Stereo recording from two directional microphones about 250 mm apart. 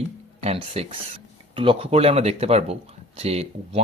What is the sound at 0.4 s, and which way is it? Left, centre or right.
A man's voice, right.